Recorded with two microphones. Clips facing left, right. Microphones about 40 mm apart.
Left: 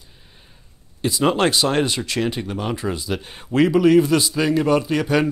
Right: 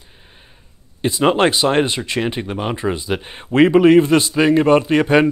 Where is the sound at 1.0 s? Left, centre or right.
Right.